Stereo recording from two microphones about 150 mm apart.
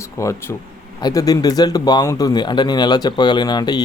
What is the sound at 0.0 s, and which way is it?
Speech, 20° left (ahead or behind).